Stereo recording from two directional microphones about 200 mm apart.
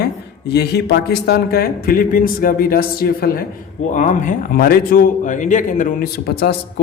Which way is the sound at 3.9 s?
40° left (ahead or behind).